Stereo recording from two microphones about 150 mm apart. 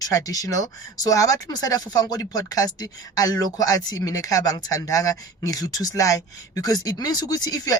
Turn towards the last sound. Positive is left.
turn(degrees=25)  # may be behind; listen again after turning